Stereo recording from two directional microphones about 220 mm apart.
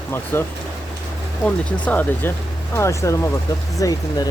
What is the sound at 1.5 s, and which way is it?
Speech, 5° left (ahead or behind).